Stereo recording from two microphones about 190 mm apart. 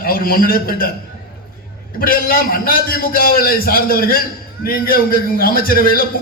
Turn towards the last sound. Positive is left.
turn(degrees=50)  # may be behind; listen again after turning